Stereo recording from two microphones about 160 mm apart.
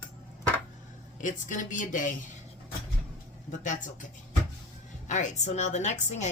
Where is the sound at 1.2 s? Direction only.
50° left (ahead or behind).